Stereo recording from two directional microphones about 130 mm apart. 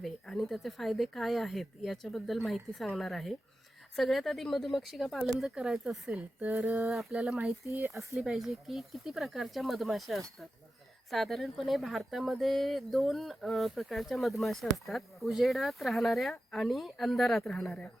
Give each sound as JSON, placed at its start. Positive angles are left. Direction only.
{"t": 0.0, "sound": "speech", "side_deg": 5}
{"t": 7.6, "sound": "speech", "side_deg": -20}
{"t": 8.2, "sound": "speech", "side_deg": 0}